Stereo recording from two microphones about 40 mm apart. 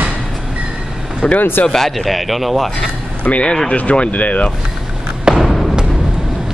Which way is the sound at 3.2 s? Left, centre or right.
Left.